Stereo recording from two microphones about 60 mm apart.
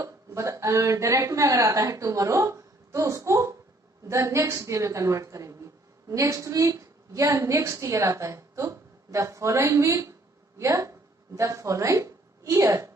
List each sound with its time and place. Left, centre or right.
0.0 s a woman's voice: right